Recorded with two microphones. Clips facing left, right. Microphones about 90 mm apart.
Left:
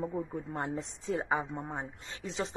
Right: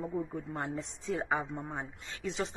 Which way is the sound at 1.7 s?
25° left (ahead or behind).